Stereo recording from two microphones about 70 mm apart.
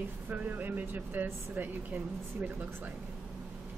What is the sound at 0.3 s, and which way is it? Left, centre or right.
Speech, right.